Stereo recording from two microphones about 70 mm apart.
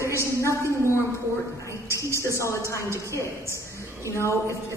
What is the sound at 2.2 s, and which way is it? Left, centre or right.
Speech, left.